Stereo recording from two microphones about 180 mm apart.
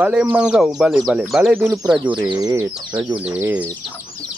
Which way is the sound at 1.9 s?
25° right (ahead or behind).